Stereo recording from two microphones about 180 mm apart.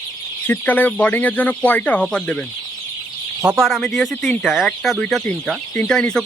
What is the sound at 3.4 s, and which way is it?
Speech, centre (ahead or behind).